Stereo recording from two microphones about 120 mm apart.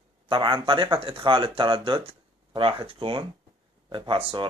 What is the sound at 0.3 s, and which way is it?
Speech, 45° right (ahead or behind).